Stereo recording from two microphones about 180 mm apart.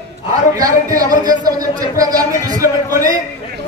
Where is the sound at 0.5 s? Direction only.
20° right (ahead or behind).